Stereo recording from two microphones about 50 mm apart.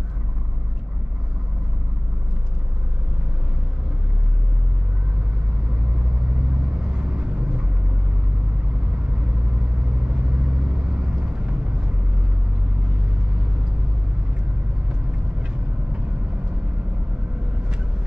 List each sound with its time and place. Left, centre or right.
6.8 s vehicle: right
10.0 s vehicle: centre